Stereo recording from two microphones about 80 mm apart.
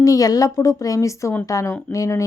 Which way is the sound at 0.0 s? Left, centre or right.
Left.